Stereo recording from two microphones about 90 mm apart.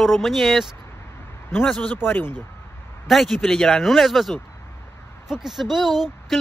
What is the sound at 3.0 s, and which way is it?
Speech, centre (ahead or behind).